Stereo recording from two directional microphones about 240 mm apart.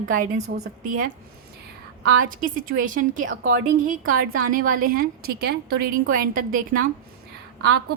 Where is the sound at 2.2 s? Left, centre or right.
Right.